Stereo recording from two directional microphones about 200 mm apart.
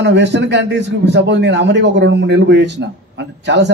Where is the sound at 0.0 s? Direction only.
60° right (ahead or behind).